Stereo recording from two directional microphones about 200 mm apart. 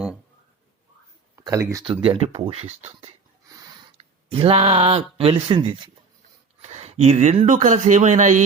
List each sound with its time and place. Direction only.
1.4 s speech: 15° right (ahead or behind); by 3.1 s 30° right (ahead or behind)
3.5 s a sound: 20° right (ahead or behind)
3.9 s speech: 30° right (ahead or behind)